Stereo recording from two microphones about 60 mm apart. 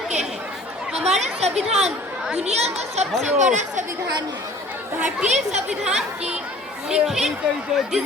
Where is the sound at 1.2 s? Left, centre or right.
Centre.